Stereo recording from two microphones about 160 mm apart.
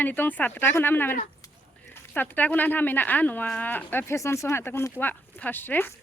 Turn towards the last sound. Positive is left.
turn(degrees=15)  # may be behind; listen again after turning